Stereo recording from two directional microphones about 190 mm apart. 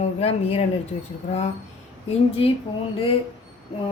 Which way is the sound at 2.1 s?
30° left (ahead or behind).